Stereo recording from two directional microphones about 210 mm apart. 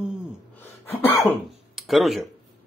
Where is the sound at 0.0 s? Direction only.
5° right (ahead or behind).